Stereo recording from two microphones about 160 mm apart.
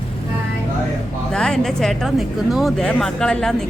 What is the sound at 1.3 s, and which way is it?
Speech, 5° left (ahead or behind).